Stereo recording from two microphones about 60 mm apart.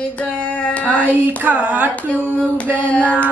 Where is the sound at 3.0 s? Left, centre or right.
Right.